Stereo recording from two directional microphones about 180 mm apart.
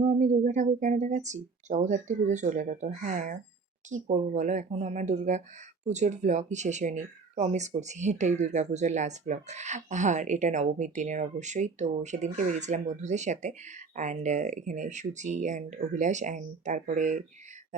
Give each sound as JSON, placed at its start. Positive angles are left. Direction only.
{"t": 0.0, "sound": "speech", "side_deg": -45}